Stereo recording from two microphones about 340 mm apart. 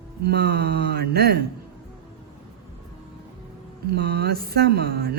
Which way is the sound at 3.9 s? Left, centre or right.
Right.